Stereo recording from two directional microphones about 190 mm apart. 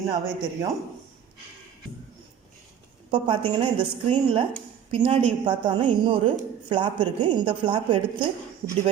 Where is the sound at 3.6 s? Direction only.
25° right (ahead or behind).